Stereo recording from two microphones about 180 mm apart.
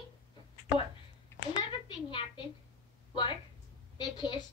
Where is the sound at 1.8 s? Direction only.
25° left (ahead or behind).